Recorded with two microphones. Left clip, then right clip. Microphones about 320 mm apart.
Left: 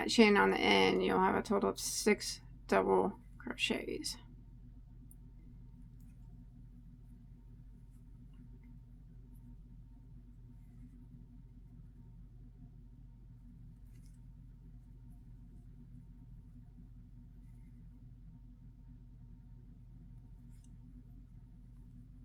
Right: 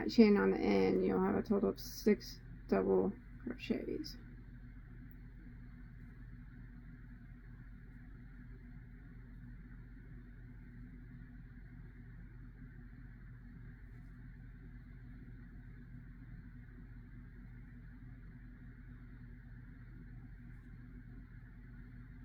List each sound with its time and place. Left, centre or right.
0.0 s speech: centre